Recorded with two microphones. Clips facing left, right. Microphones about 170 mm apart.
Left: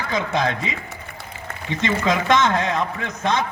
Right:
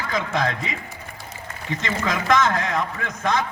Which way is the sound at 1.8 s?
25° left (ahead or behind).